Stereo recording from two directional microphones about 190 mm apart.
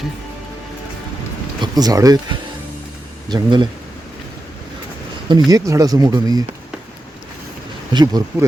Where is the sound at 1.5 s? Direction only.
20° right (ahead or behind).